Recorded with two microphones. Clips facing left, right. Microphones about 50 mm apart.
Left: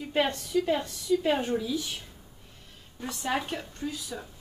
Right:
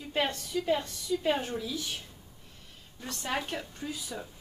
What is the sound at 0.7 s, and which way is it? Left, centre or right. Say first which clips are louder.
Speech: left 3 dB; centre.